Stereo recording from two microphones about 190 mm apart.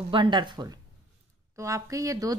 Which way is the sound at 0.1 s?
25° right (ahead or behind).